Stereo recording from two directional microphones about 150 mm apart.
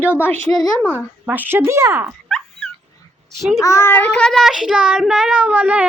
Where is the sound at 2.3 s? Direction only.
5° left (ahead or behind).